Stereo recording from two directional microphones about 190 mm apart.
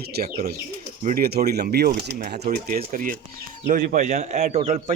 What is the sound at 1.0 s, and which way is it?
Speech, 45° right (ahead or behind).